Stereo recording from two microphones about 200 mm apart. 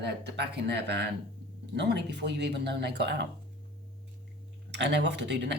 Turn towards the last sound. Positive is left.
turn(degrees=-60)  # may be behind; listen again after turning